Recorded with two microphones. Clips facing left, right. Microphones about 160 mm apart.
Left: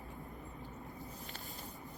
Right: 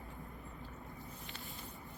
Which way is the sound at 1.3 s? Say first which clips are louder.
Left 1 dB; 40° left (ahead or behind).